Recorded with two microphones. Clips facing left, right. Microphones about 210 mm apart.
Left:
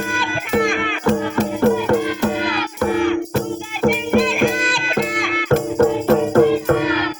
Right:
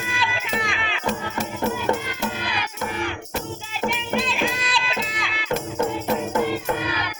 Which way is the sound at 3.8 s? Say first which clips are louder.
Left 9 dB; 50° left (ahead or behind).